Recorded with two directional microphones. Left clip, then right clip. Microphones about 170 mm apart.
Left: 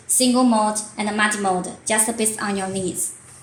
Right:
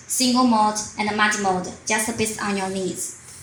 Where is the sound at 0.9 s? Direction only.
50° left (ahead or behind).